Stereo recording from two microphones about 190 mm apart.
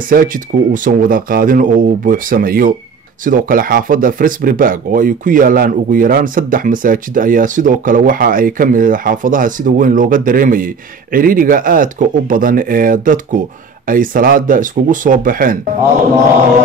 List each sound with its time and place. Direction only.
0.1 s speech: 45° right (ahead or behind)